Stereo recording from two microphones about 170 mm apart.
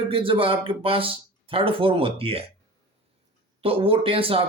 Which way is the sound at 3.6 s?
35° right (ahead or behind).